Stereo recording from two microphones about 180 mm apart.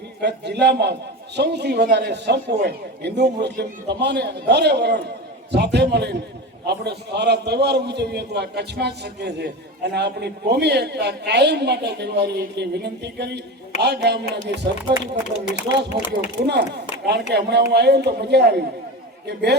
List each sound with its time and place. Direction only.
0.2 s a man's voice: 70° right (ahead or behind)